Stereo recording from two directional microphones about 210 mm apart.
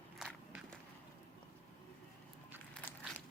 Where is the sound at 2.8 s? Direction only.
5° left (ahead or behind).